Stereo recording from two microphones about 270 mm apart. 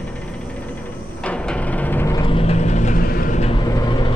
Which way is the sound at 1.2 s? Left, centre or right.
Centre.